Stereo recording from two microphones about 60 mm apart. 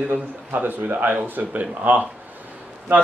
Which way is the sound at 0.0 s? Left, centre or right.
Right.